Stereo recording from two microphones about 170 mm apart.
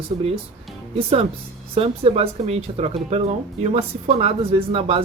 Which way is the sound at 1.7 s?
35° right (ahead or behind).